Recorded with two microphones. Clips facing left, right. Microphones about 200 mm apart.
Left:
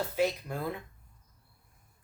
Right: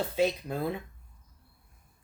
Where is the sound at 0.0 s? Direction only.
25° right (ahead or behind).